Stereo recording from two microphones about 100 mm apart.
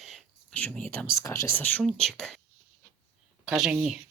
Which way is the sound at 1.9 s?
5° left (ahead or behind).